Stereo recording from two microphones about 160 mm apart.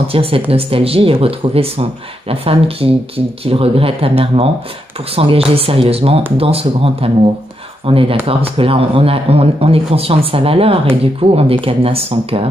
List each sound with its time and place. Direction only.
0.1 s speech: 35° right (ahead or behind)